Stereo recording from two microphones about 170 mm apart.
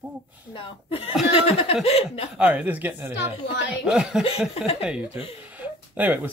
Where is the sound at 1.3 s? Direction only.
35° left (ahead or behind).